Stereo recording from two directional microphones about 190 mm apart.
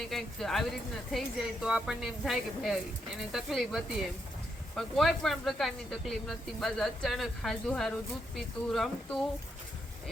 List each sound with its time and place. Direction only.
0.1 s speech: centre (ahead or behind)
1.6 s speech: 5° right (ahead or behind)